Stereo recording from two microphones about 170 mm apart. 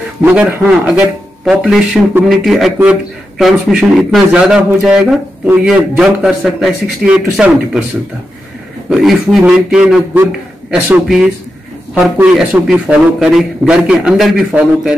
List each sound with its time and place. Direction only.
0.2 s a man's voice: 10° right (ahead or behind)
8.9 s a man's voice: centre (ahead or behind)